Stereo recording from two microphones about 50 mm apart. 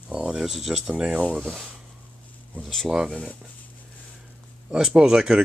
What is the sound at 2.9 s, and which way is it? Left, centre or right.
Speech, centre.